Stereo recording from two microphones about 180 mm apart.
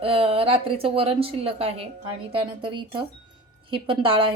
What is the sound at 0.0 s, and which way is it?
A woman's voice, 30° right (ahead or behind).